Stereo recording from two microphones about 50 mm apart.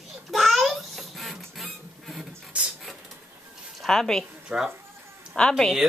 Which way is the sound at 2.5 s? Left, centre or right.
Right.